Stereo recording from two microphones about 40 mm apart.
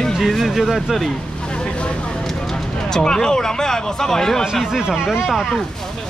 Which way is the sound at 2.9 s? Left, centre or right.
Centre.